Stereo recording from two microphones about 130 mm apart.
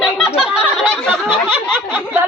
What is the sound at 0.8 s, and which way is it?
Speech, 5° left (ahead or behind).